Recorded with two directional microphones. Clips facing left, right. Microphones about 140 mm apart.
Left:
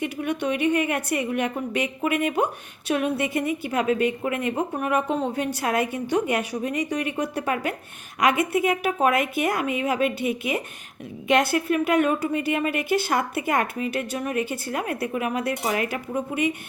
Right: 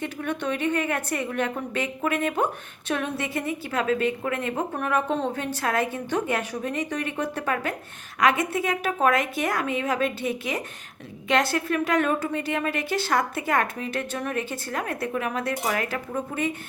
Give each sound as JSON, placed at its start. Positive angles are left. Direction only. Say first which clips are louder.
{"t": 0.0, "sound": "a woman's voice", "louder": "left 3 dB", "side_deg": 15}